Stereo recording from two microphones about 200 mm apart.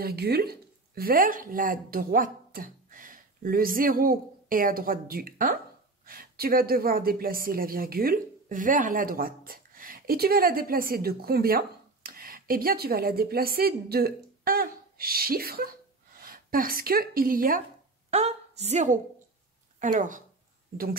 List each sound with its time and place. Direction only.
0.0 s a woman's voice: 50° right (ahead or behind)
18.1 s a woman's voice: 30° right (ahead or behind)